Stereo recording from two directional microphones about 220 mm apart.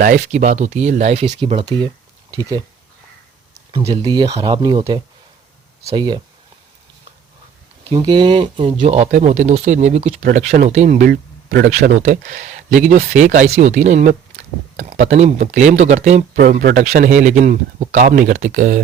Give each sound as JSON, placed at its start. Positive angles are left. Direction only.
{"t": 0.0, "sound": "speech", "side_deg": -35}
{"t": 3.7, "sound": "speech", "side_deg": -25}
{"t": 7.9, "sound": "speech", "side_deg": -20}